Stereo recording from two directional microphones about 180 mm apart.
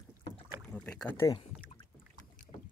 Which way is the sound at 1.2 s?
30° left (ahead or behind).